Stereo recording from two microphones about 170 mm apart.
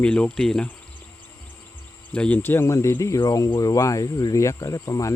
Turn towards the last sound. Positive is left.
turn(degrees=20)  # may be behind; listen again after turning